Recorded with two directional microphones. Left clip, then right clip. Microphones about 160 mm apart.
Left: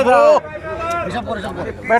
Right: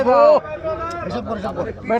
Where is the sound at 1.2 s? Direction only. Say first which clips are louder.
Left 2 dB; 25° right (ahead or behind).